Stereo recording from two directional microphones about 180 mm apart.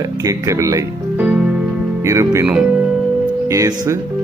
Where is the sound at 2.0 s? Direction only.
15° right (ahead or behind).